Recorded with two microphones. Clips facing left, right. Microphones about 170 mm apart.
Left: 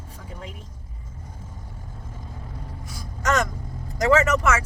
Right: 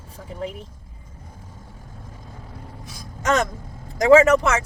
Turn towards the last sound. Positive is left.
turn(degrees=-20)  # may be behind; listen again after turning